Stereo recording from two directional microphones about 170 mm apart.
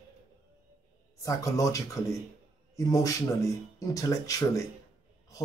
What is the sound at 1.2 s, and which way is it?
Speech, 20° left (ahead or behind).